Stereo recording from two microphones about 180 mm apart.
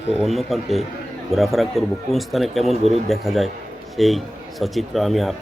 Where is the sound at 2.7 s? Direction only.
35° right (ahead or behind).